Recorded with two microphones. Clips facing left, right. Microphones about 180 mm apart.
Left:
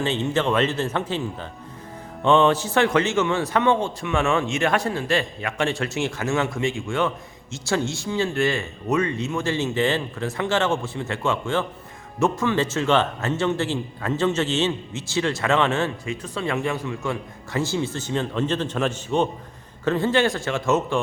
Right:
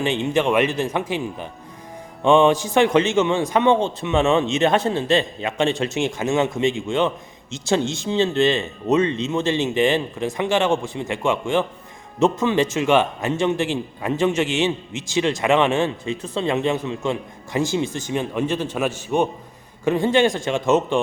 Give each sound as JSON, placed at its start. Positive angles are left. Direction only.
{"t": 0.0, "sound": "a man's voice", "side_deg": -15}